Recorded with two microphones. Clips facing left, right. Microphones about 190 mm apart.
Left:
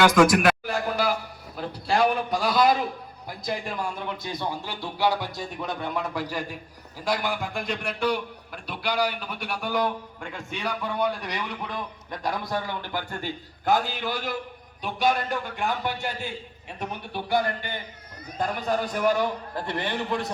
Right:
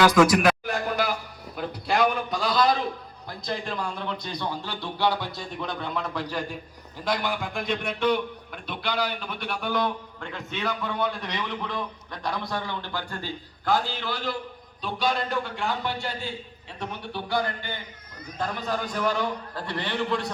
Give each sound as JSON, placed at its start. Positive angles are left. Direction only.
{"t": 0.0, "sound": "a sound", "side_deg": 0}
{"t": 2.4, "sound": "a man's voice", "side_deg": 10}
{"t": 12.1, "sound": "a man's voice", "side_deg": 45}
{"t": 12.6, "sound": "a man's voice", "side_deg": 15}